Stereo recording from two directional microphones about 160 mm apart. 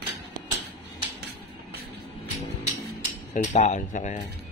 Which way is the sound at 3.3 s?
50° left (ahead or behind).